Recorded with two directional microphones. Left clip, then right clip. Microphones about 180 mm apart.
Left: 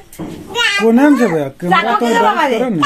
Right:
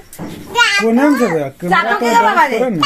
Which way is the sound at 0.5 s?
5° left (ahead or behind).